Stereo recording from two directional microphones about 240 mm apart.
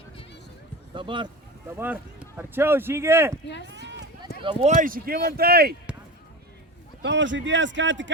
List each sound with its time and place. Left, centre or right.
0.9 s speech: centre
1.7 s speech: centre
3.7 s run: right
4.4 s speech: right
7.0 s speech: right